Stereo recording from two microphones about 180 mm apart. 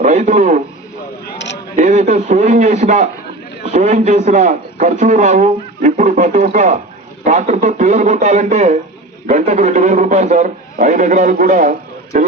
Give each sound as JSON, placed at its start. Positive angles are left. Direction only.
{"t": 0.0, "sound": "a man's voice", "side_deg": -40}
{"t": 1.2, "sound": "a sound", "side_deg": 75}
{"t": 1.7, "sound": "a man's voice", "side_deg": -40}